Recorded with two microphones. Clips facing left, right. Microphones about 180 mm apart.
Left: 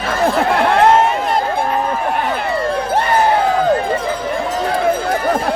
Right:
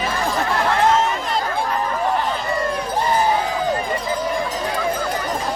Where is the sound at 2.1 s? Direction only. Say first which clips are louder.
Left 3 dB; 75° left (ahead or behind).